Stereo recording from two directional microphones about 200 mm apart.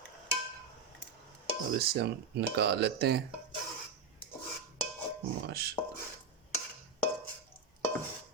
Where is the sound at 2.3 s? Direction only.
55° right (ahead or behind).